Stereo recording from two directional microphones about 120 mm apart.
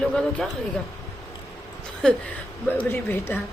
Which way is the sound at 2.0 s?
5° left (ahead or behind).